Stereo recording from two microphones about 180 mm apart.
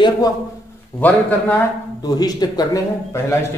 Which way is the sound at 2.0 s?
20° left (ahead or behind).